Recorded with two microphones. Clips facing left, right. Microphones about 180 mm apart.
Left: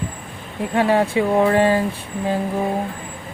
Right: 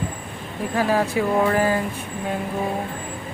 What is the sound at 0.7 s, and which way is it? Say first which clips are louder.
Speech: left 4 dB; 25° left (ahead or behind).